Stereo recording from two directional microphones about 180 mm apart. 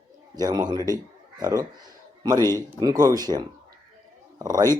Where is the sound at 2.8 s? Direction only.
20° right (ahead or behind).